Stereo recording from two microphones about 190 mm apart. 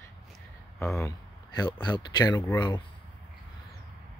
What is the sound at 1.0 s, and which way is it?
Speech, 20° left (ahead or behind).